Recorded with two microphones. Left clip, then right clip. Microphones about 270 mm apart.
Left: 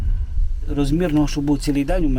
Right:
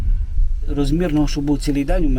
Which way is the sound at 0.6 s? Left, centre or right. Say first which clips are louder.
Even; centre.